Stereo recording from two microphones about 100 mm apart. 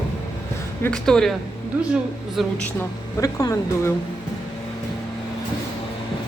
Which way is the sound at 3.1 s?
35° left (ahead or behind).